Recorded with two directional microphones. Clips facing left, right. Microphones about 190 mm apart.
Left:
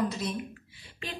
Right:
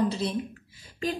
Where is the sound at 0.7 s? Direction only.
40° right (ahead or behind).